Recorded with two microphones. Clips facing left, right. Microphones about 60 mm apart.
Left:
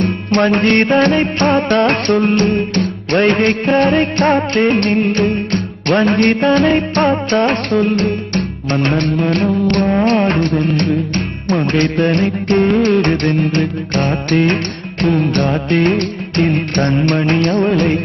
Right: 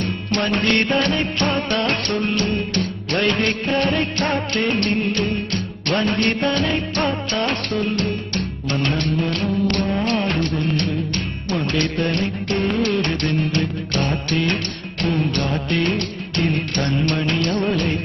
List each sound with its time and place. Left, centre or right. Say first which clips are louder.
0.0 s music: left 8 dB; left
6.0 s music: left 7 dB; left